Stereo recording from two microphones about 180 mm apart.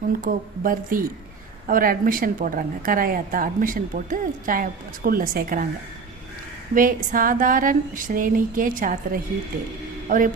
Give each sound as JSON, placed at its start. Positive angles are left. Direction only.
{"t": 0.2, "sound": "a woman's voice", "side_deg": -50}
{"t": 6.7, "sound": "a woman's voice", "side_deg": -50}